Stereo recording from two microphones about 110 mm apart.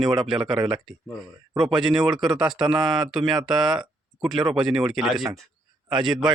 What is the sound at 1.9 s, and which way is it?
Speech, 40° right (ahead or behind).